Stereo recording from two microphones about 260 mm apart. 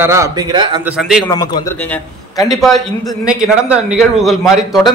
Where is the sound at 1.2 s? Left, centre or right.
Centre.